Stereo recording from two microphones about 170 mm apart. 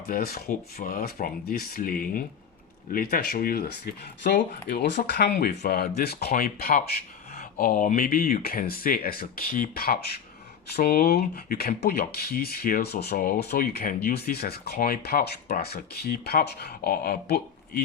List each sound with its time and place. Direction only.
0.1 s speech: 60° left (ahead or behind)